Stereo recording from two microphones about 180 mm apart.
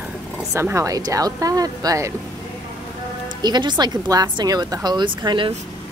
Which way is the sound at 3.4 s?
25° right (ahead or behind).